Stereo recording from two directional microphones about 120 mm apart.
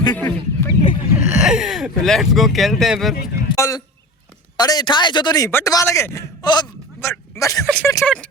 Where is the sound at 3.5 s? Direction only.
25° left (ahead or behind).